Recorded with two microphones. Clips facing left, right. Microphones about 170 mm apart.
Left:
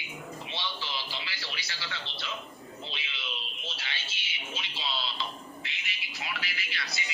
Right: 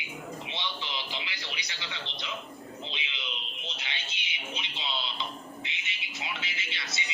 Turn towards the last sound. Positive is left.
turn(degrees=-25)  # may be behind; listen again after turning